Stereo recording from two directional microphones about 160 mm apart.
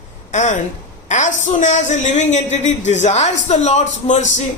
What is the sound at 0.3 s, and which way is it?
A woman's voice, 50° left (ahead or behind).